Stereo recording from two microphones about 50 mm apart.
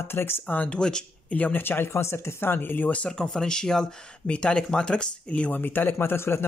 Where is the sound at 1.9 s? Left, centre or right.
Left.